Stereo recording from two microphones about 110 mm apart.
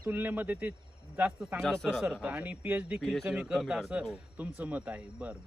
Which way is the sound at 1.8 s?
5° right (ahead or behind).